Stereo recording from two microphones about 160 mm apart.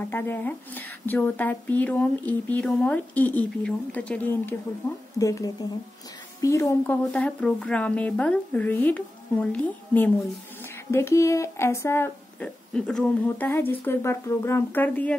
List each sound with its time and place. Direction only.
0.1 s a woman's voice: 15° left (ahead or behind)
7.1 s a woman's voice: 5° left (ahead or behind)